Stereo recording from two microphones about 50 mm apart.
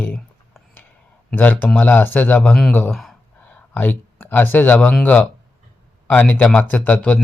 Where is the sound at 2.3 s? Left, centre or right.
Left.